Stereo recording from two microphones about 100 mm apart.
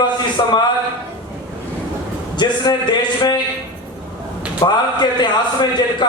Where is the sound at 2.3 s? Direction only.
50° left (ahead or behind).